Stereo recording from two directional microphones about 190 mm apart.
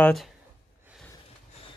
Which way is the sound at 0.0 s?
Centre (ahead or behind).